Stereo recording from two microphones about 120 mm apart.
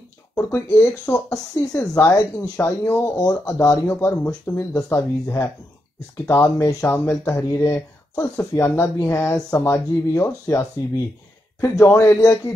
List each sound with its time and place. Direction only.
0.5 s speech: 20° left (ahead or behind)